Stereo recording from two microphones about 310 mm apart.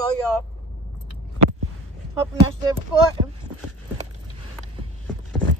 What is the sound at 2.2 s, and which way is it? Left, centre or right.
Speech, centre.